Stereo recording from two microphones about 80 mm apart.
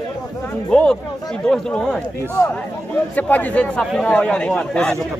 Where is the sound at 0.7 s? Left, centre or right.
Centre.